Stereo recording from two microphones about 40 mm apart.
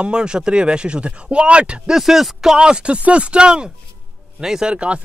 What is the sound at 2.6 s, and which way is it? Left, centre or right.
Speech, right.